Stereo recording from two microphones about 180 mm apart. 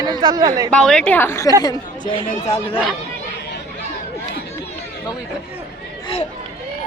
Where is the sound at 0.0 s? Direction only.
20° right (ahead or behind).